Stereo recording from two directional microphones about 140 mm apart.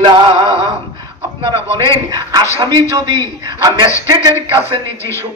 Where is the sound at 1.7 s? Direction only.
25° right (ahead or behind).